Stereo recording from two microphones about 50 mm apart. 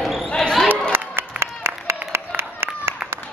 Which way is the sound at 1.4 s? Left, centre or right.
Right.